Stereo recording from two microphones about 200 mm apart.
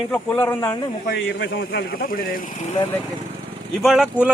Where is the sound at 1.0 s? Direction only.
60° left (ahead or behind); by 2.7 s 40° left (ahead or behind).